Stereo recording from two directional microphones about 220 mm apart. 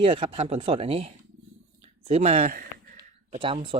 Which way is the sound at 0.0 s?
25° right (ahead or behind).